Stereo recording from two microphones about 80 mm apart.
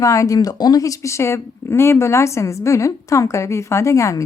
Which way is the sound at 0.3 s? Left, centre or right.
Left.